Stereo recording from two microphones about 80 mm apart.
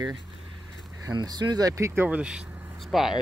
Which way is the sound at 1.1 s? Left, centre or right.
Right.